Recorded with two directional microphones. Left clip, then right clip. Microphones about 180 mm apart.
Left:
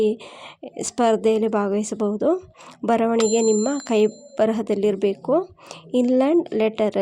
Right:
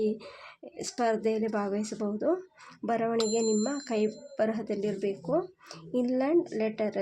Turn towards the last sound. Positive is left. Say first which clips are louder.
# left 10 dB
turn(degrees=35)  # may be behind; listen again after turning